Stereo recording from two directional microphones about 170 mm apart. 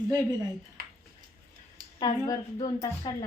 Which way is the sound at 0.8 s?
65° right (ahead or behind).